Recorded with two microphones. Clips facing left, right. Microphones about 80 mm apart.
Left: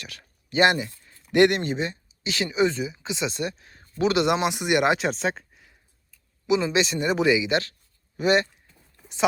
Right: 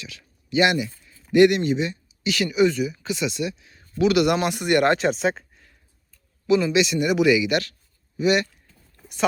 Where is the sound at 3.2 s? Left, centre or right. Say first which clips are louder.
Right 2 dB; left; by 5.0 s centre.